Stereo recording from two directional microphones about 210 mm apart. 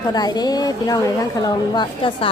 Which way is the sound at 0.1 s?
20° left (ahead or behind).